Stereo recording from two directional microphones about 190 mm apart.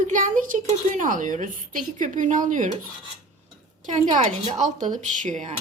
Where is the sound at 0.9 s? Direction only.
45° right (ahead or behind).